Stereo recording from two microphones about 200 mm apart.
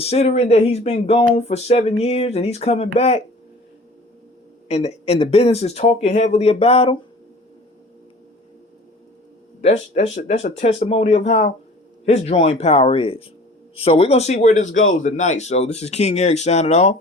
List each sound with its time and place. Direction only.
0.0 s speech: 30° left (ahead or behind)
4.7 s speech: 35° left (ahead or behind)
9.6 s speech: 35° left (ahead or behind)